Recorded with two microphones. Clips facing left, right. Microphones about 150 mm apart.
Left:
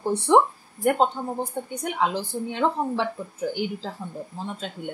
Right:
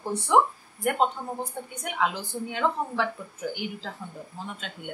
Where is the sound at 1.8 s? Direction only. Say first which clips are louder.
Left 3 dB; 30° left (ahead or behind).